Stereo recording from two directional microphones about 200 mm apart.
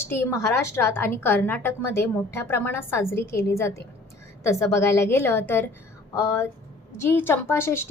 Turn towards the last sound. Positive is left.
turn(degrees=10)  # may be behind; listen again after turning